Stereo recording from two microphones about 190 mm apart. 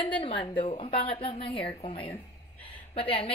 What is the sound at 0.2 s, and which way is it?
A woman's voice, 25° left (ahead or behind).